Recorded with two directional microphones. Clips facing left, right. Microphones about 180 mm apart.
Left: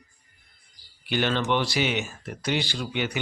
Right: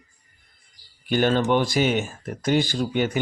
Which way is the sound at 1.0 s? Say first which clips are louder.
Right 5 dB; 45° right (ahead or behind).